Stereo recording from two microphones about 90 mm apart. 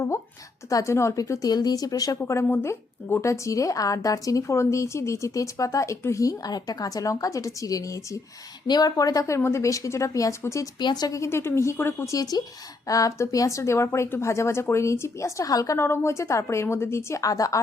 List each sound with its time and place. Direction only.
0.7 s speech: 35° left (ahead or behind)
8.6 s speech: 50° left (ahead or behind); by 10.7 s 35° left (ahead or behind)
10.8 s speech: 50° left (ahead or behind)
11.2 s speech: 30° left (ahead or behind)
12.1 s speech: 45° left (ahead or behind)
15.8 s speech: 30° left (ahead or behind)